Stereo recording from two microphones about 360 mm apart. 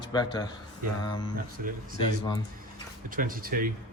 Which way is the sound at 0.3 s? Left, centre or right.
Centre.